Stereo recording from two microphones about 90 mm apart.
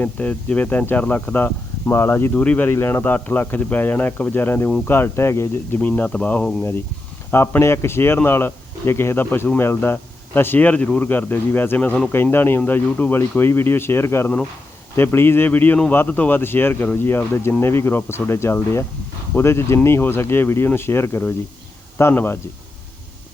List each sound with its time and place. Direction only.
0.0 s speech: 15° left (ahead or behind)
2.6 s speech: 25° left (ahead or behind)
6.6 s speech: 25° left (ahead or behind)